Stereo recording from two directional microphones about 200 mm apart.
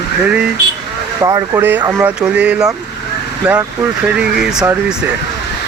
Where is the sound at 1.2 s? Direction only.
15° right (ahead or behind).